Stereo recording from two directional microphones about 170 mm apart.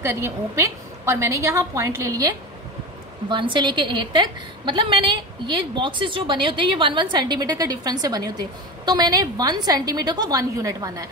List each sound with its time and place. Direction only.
0.0 s a woman's voice: 15° right (ahead or behind)